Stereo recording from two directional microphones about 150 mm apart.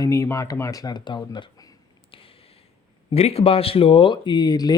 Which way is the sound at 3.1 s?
40° left (ahead or behind).